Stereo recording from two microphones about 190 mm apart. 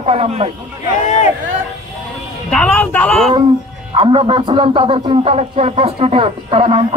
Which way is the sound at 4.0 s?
30° right (ahead or behind).